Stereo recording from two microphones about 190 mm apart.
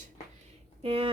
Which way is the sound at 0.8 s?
30° right (ahead or behind).